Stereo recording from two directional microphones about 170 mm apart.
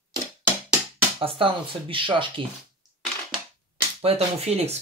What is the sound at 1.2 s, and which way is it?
Speech, 30° right (ahead or behind).